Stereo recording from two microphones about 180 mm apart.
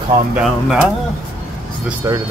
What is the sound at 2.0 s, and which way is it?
Speech, 15° right (ahead or behind).